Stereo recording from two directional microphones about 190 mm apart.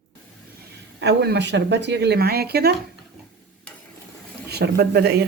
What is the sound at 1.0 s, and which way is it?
Speech, 60° right (ahead or behind).